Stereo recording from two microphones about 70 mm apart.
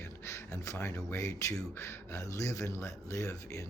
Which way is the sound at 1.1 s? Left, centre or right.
Left.